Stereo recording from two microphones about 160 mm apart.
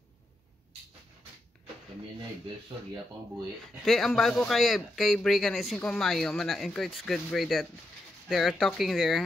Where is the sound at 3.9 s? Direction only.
Centre (ahead or behind).